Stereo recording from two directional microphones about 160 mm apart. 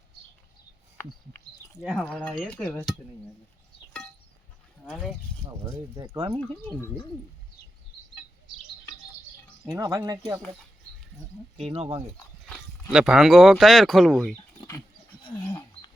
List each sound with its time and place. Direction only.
0.9 s speech: 20° left (ahead or behind)
1.8 s speech: 5° left (ahead or behind)
4.9 s speech: centre (ahead or behind)
6.1 s speech: 30° right (ahead or behind)
9.7 s speech: 20° right (ahead or behind)
11.7 s speech: 40° right (ahead or behind)
12.9 s speech: 5° right (ahead or behind)